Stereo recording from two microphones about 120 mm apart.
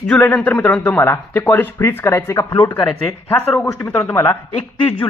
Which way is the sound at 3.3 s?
25° left (ahead or behind).